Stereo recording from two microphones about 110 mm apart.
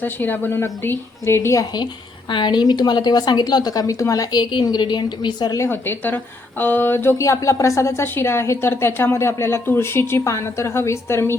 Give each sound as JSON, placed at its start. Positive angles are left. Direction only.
{"t": 0.0, "sound": "a woman's voice", "side_deg": 15}
{"t": 2.3, "sound": "a woman's voice", "side_deg": 45}
{"t": 5.5, "sound": "a woman's voice", "side_deg": 20}